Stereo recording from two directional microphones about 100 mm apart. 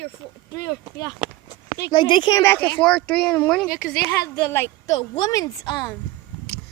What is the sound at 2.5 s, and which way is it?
Speech, 15° left (ahead or behind).